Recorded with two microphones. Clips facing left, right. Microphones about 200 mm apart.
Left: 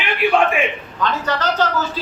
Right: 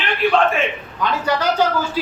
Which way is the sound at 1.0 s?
10° right (ahead or behind).